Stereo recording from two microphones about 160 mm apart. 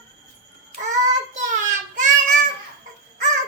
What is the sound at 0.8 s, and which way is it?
Child singing, 50° right (ahead or behind).